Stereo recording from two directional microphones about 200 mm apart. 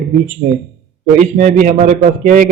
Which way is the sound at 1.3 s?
40° right (ahead or behind).